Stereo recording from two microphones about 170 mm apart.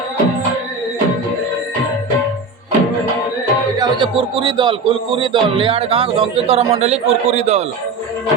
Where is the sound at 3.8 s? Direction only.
30° right (ahead or behind).